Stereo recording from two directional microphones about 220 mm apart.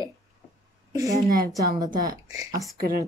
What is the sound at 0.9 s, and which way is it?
A woman's voice, 15° right (ahead or behind).